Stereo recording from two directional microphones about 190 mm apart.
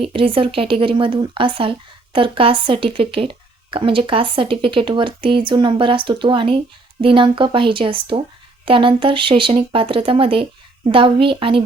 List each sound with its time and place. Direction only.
0.0 s a woman's voice: 30° right (ahead or behind)